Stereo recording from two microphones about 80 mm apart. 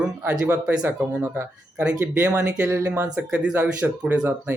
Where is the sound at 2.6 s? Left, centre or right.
Right.